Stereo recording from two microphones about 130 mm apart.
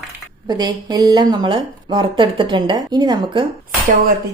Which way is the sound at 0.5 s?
30° right (ahead or behind).